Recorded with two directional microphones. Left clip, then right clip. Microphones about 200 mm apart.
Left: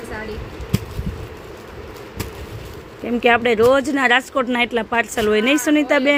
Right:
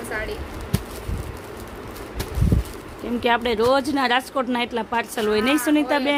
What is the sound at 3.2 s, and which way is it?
Speech, 10° left (ahead or behind).